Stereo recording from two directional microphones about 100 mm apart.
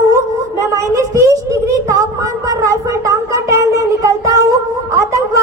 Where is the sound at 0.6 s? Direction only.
30° right (ahead or behind).